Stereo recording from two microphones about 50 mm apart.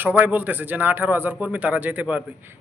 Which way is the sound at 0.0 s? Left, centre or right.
Right.